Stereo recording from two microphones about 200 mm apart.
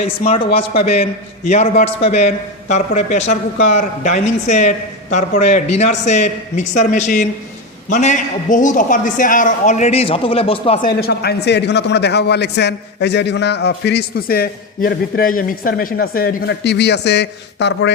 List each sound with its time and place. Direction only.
0.0 s a man's voice: 35° left (ahead or behind)
10.8 s a man's voice: 50° left (ahead or behind)